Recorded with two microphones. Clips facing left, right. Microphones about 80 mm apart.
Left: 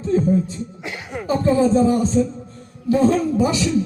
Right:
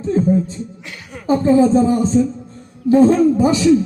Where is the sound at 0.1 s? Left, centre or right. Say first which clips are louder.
Even; right.